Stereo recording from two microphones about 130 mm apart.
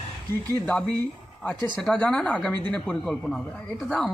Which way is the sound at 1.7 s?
5° left (ahead or behind).